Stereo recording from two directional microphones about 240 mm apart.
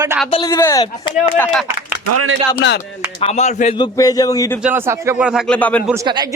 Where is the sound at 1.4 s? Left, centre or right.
Centre.